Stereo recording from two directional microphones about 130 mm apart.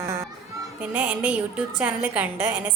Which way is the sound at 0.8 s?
10° right (ahead or behind).